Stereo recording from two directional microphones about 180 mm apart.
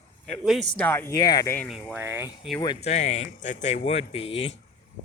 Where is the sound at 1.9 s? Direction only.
10° right (ahead or behind).